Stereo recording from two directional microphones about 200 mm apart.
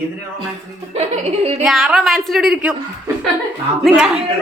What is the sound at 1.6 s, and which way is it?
A woman's voice, centre (ahead or behind).